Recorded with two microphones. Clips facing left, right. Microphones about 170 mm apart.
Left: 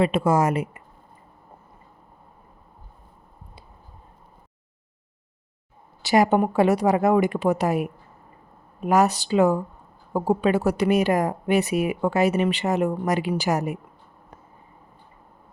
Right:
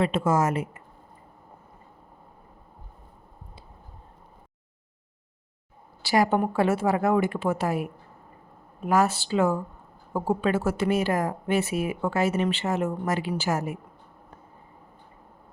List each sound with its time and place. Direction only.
0.0 s a woman's voice: 10° left (ahead or behind)
6.0 s a woman's voice: 20° left (ahead or behind)